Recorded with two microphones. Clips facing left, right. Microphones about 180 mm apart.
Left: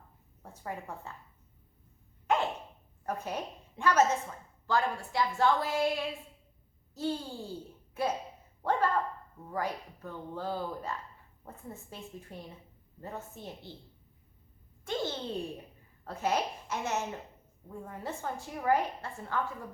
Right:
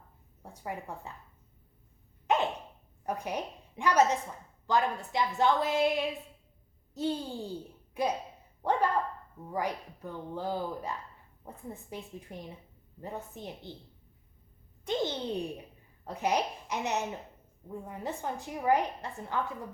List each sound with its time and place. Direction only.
0.4 s a woman's voice: 15° right (ahead or behind)
2.2 s dog: 20° right (ahead or behind)
3.1 s a woman's voice: 15° right (ahead or behind)
14.8 s a sound: 15° right (ahead or behind)
16.0 s a woman's voice: 15° right (ahead or behind)